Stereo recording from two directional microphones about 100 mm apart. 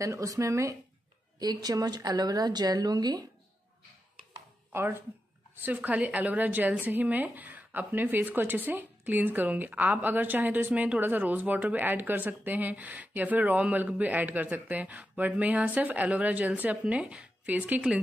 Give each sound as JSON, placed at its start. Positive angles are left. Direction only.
{"t": 0.0, "sound": "speech", "side_deg": -35}
{"t": 1.4, "sound": "speech", "side_deg": -40}
{"t": 4.7, "sound": "a woman's voice", "side_deg": -25}